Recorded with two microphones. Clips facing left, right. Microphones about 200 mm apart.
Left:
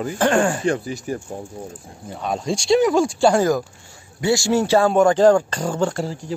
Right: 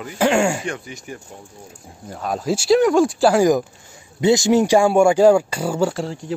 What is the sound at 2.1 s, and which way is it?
Speech, centre (ahead or behind).